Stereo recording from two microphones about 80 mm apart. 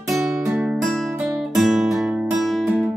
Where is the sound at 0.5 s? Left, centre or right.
Centre.